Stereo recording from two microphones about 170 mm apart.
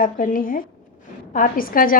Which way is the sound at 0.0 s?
55° left (ahead or behind).